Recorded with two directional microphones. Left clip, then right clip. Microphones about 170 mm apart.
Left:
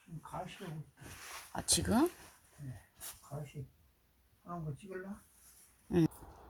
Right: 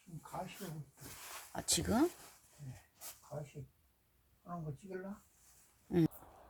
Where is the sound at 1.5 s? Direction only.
15° right (ahead or behind).